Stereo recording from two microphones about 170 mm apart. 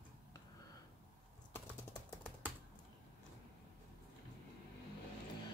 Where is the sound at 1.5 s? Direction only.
15° left (ahead or behind).